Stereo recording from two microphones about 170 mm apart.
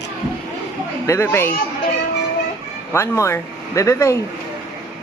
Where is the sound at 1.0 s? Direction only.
15° left (ahead or behind).